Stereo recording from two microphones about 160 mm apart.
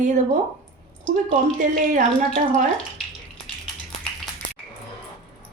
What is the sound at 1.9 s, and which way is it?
Speech, 55° right (ahead or behind).